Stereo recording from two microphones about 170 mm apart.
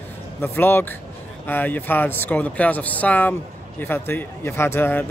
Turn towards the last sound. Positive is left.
turn(degrees=10)  # may be behind; listen again after turning